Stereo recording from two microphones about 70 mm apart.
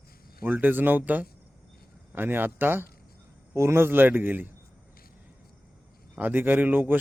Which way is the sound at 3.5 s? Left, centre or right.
Right.